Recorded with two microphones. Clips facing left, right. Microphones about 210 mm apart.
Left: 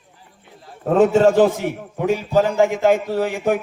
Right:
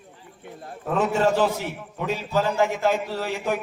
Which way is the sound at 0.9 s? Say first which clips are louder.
Left 8 dB; 50° left (ahead or behind).